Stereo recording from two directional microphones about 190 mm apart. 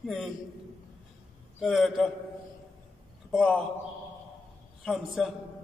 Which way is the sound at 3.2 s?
Centre (ahead or behind).